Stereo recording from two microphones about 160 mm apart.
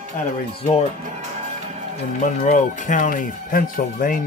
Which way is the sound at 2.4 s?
50° left (ahead or behind).